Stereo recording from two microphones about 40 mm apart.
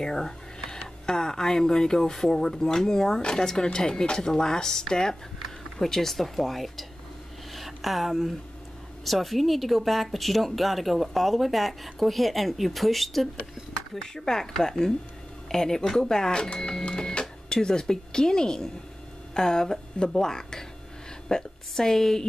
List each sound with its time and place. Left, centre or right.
0.0 s speech: centre
14.1 s speech: centre